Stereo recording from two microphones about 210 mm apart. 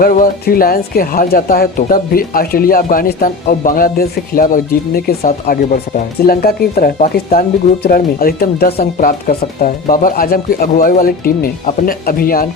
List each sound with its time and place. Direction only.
0.0 s speech: 40° left (ahead or behind)